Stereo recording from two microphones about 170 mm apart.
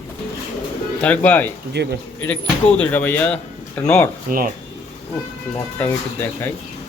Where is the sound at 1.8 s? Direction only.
80° right.